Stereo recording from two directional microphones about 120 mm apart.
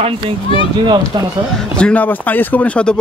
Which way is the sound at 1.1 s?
40° right (ahead or behind).